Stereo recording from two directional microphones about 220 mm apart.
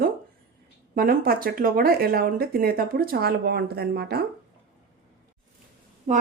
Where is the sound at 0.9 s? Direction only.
40° right (ahead or behind).